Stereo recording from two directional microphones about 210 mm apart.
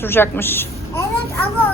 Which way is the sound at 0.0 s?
10° left (ahead or behind).